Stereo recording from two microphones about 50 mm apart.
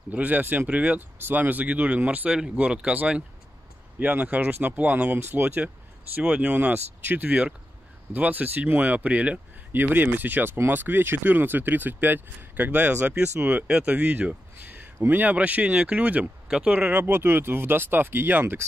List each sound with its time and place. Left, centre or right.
0.1 s speech: right
4.0 s speech: right
4.6 s speech: right
5.3 s speech: right
6.3 s speech: right
6.7 s speech: right
9.7 s speech: right
13.2 s speech: right
17.0 s speech: right